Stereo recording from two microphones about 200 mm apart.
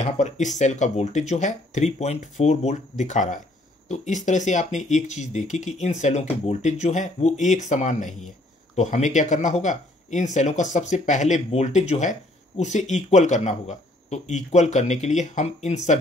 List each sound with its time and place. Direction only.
0.0 s speech: 35° left (ahead or behind)